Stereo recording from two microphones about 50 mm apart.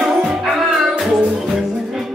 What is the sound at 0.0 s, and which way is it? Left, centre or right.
Music, centre.